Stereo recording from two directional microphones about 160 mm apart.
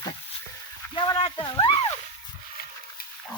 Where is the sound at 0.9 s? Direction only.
30° left (ahead or behind).